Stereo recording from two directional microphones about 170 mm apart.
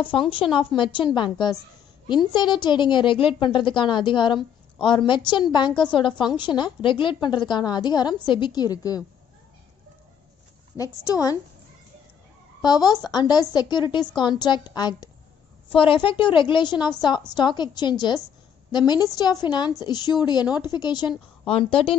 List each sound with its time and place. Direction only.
0.1 s a woman's voice: 30° left (ahead or behind)
10.8 s a woman's voice: 20° left (ahead or behind)
12.6 s a woman's voice: 25° left (ahead or behind)